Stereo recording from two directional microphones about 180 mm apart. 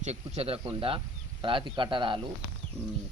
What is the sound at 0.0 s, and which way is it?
Speech, 40° right (ahead or behind).